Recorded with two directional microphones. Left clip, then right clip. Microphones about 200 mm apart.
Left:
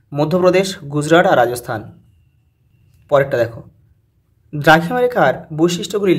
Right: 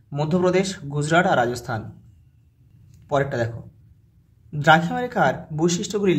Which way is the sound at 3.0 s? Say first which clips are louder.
Left 9 dB; 25° left (ahead or behind).